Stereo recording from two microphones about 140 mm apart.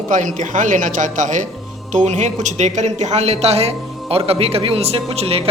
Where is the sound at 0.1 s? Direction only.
65° right (ahead or behind).